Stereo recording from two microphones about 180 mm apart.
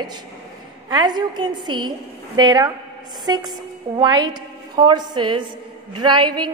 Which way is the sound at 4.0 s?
25° right (ahead or behind).